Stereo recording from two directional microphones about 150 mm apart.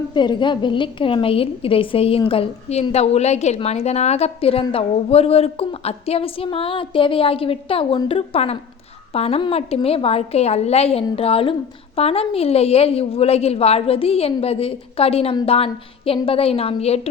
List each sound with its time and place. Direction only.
0.1 s a woman's voice: 30° left (ahead or behind)